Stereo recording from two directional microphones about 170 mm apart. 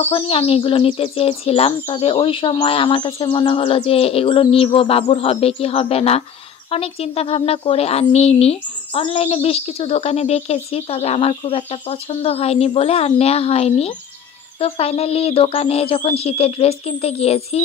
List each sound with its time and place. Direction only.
0.1 s speech: 35° left (ahead or behind)